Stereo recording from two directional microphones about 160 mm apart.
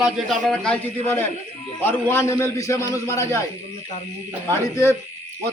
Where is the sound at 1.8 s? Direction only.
15° left (ahead or behind).